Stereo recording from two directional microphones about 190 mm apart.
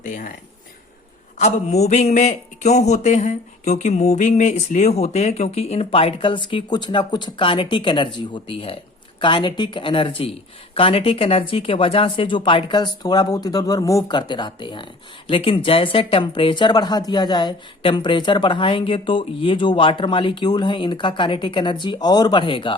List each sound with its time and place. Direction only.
0.0 s speech: 45° left (ahead or behind)
1.4 s speech: 35° left (ahead or behind)